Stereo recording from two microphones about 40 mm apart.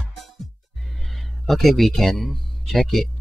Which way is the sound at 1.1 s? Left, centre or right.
Centre.